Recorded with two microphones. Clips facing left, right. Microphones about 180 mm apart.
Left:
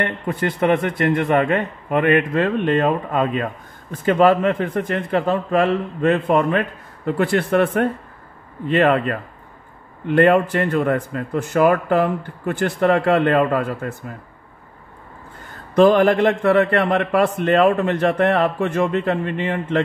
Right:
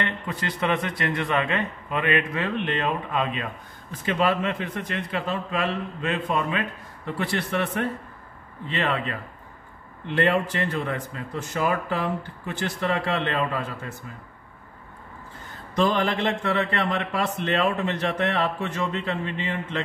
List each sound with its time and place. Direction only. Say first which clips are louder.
0.0 s a man's voice: left 7 dB; 55° left (ahead or behind)
15.7 s a man's voice: left 10 dB; 55° left (ahead or behind)